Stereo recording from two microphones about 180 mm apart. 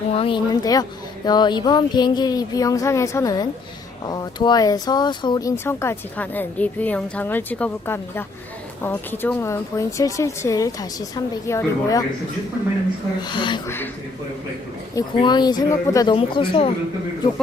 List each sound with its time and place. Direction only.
0.1 s speech: 30° left (ahead or behind)
13.2 s speech: 25° left (ahead or behind)
13.7 s speech: 10° left (ahead or behind)
14.9 s speech: 25° left (ahead or behind)
16.1 s speech: 30° left (ahead or behind)